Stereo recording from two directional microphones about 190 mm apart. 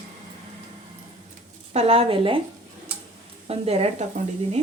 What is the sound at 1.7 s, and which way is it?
Speech, 30° right (ahead or behind).